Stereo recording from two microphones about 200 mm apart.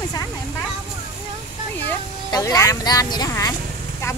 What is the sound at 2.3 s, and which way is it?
Speech, 15° left (ahead or behind).